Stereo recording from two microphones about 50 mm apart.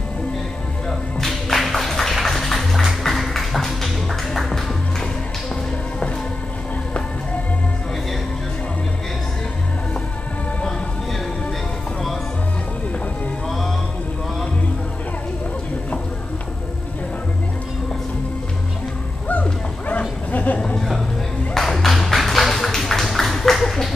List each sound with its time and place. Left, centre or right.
0.8 s music: centre
19.2 s bow-wow: left
21.5 s a sound: centre